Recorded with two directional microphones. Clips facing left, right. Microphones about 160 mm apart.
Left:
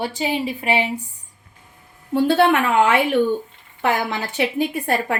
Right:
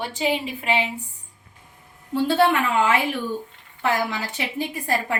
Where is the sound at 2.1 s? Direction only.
70° left (ahead or behind).